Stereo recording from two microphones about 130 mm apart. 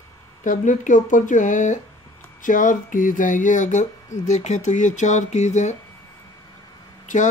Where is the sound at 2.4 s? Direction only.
90° left; by 5.8 s 65° left (ahead or behind).